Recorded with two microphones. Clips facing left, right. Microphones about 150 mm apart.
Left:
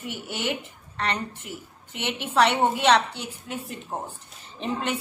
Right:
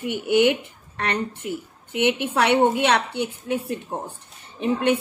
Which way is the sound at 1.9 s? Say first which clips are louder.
Right 6 dB; 55° right (ahead or behind).